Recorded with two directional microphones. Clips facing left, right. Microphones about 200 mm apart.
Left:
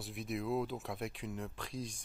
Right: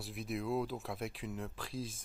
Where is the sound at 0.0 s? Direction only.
Centre (ahead or behind).